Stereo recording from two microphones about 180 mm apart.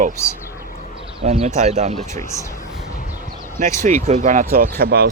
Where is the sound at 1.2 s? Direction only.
40° right (ahead or behind).